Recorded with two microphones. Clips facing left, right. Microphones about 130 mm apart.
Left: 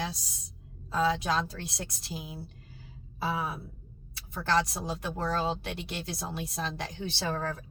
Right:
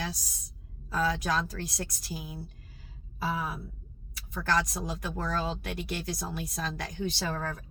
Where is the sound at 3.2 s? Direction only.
25° left (ahead or behind).